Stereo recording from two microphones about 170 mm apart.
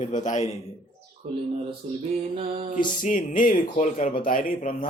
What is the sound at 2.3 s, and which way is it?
Bird, 35° right (ahead or behind).